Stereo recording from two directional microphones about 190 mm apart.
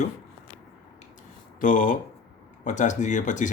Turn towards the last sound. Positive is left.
turn(degrees=40)  # may be behind; listen again after turning